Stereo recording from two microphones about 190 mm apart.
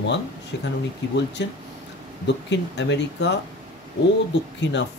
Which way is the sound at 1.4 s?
65° left (ahead or behind).